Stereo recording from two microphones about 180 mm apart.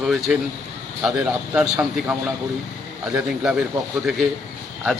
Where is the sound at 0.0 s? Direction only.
Centre (ahead or behind).